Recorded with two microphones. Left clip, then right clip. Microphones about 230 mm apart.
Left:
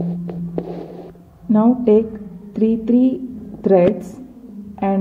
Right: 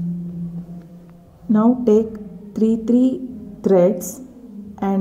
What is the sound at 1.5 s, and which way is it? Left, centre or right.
Speech, right.